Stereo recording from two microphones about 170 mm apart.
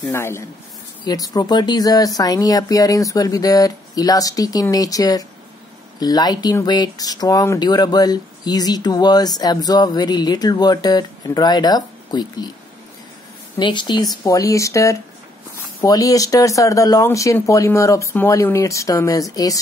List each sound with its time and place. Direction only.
0.1 s speech: 15° left (ahead or behind)
13.6 s speech: 25° left (ahead or behind)